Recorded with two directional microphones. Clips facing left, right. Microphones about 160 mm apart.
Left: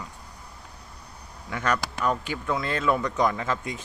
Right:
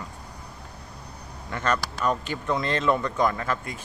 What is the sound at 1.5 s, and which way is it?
Speech, 10° left (ahead or behind).